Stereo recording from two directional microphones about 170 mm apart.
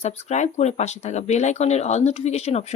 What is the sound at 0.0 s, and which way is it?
Speech, 40° left (ahead or behind).